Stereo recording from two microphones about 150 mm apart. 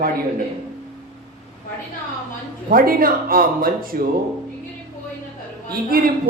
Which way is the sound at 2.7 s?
75° right (ahead or behind).